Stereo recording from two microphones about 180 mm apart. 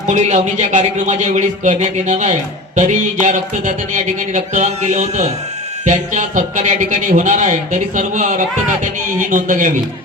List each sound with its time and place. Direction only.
0.1 s speech: 40° right (ahead or behind)